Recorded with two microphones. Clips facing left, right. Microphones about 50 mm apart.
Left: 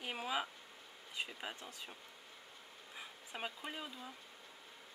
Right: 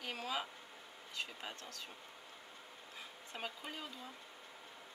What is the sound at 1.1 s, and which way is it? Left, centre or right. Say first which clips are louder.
Speech: left 1 dB; centre.